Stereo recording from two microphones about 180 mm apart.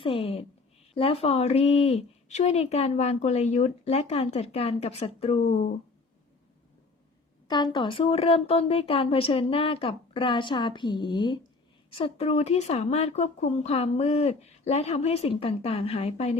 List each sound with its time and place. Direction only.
0.0 s speech: 30° left (ahead or behind)
7.4 s speech: 25° left (ahead or behind)